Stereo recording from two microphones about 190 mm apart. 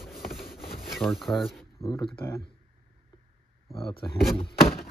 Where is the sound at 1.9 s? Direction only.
25° left (ahead or behind).